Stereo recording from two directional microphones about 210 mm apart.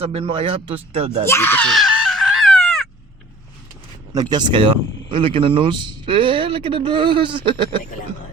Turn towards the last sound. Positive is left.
turn(degrees=-25)  # may be behind; listen again after turning